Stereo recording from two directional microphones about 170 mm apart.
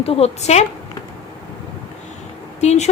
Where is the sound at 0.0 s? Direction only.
35° left (ahead or behind).